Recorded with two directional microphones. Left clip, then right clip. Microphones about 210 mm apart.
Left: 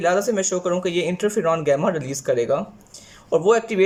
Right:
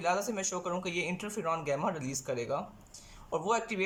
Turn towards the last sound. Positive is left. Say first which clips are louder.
# left 14 dB
turn(degrees=35)  # may be behind; listen again after turning